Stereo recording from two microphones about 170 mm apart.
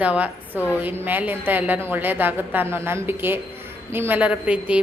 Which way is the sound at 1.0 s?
10° right (ahead or behind).